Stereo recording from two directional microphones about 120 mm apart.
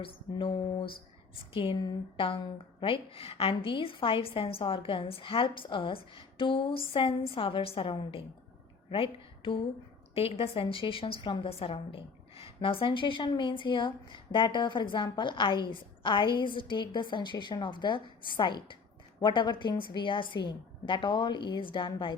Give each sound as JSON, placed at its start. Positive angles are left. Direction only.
{"t": 0.0, "sound": "a woman's voice", "side_deg": 50}